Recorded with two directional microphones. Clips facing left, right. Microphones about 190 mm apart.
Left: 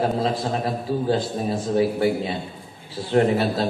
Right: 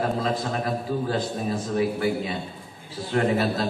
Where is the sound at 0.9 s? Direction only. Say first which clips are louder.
Left 7 dB; 30° left (ahead or behind).